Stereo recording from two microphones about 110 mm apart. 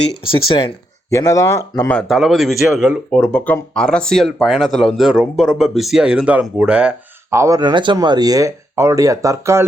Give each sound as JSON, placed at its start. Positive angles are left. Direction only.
{"t": 1.1, "sound": "speech", "side_deg": 30}
{"t": 2.0, "sound": "speech", "side_deg": -5}
{"t": 3.1, "sound": "speech", "side_deg": 10}
{"t": 7.3, "sound": "speech", "side_deg": -30}
{"t": 7.6, "sound": "speech", "side_deg": -45}